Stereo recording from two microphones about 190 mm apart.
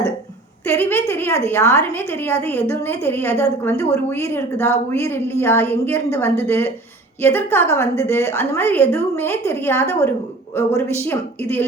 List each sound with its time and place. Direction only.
0.7 s a woman's voice: 10° left (ahead or behind)